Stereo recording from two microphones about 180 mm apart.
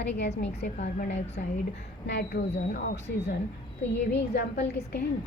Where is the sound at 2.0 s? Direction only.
65° left (ahead or behind).